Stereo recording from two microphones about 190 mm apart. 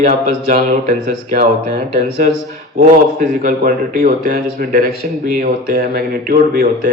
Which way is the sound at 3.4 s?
50° right (ahead or behind).